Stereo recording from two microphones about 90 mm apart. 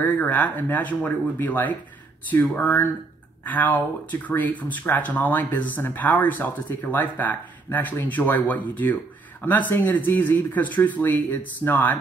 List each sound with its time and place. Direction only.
0.0 s speech: 15° left (ahead or behind)